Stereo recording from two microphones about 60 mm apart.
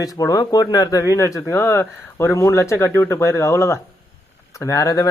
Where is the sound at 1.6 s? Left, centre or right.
Left.